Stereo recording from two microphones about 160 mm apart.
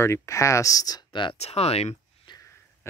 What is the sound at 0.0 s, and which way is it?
Speech, 15° left (ahead or behind).